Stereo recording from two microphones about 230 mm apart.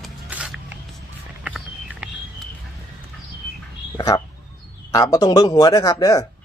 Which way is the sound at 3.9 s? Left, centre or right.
Centre.